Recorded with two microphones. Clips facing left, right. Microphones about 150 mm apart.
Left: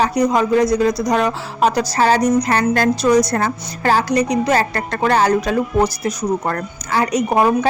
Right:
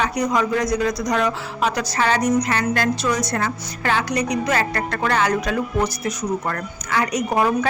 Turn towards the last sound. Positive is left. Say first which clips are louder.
# left 4 dB
turn(degrees=30)  # may be behind; listen again after turning